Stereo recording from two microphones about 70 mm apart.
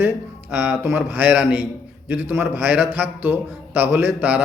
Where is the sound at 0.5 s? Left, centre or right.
Centre.